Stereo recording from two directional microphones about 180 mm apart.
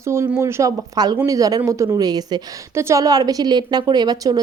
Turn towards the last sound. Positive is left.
turn(degrees=-20)  # may be behind; listen again after turning